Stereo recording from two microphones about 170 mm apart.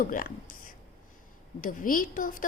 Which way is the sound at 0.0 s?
55° left (ahead or behind).